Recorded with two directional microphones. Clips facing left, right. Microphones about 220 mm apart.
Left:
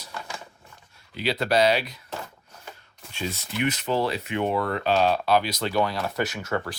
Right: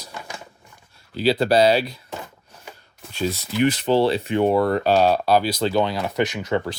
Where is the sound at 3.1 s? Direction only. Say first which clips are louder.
Right 7 dB; 35° right (ahead or behind).